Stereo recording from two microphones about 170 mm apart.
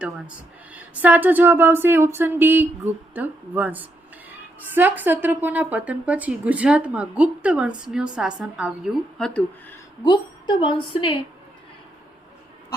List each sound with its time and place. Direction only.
0.7 s a woman's voice: 10° right (ahead or behind)
10.0 s a woman's voice: 25° left (ahead or behind)